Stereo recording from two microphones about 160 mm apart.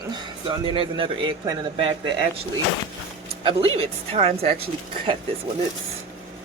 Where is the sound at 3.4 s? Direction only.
35° right (ahead or behind).